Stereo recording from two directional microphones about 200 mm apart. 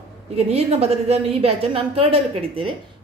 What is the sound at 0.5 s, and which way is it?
A woman's voice, 30° right (ahead or behind).